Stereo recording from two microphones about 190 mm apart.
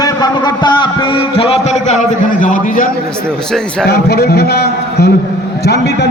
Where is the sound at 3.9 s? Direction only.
60° left (ahead or behind).